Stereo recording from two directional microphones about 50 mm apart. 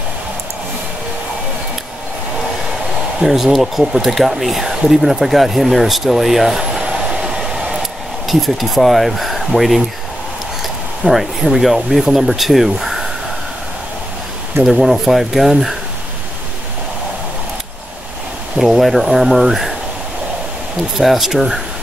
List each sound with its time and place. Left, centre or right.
3.3 s speech: centre
8.3 s speech: centre
11.1 s speech: centre
14.6 s speech: centre
18.6 s speech: centre
21.0 s speech: centre